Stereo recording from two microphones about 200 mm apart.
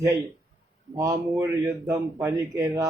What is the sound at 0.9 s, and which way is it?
A man's voice, 15° right (ahead or behind).